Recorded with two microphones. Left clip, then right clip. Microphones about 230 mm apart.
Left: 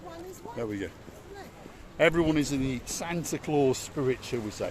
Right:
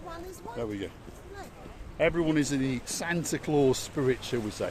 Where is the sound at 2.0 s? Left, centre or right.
Left.